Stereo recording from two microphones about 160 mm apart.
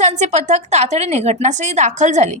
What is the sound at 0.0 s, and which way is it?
A woman's voice, 45° right (ahead or behind).